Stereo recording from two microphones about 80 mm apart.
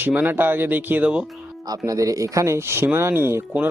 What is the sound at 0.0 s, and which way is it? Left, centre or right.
Speech, right.